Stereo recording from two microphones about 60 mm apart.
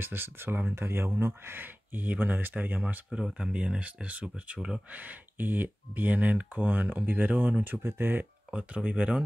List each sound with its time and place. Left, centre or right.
0.0 s speech: right
3.3 s speech: centre
4.6 s speech: centre
4.9 s speech: right
8.5 s speech: right